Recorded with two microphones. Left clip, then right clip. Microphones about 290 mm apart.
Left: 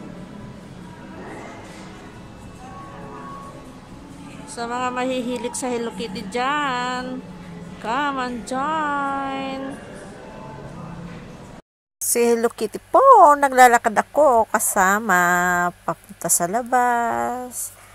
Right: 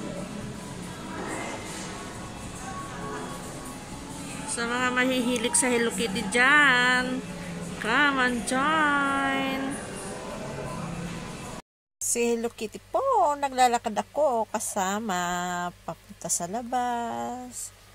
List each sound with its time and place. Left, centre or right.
4.6 s speech: centre
12.1 s speech: centre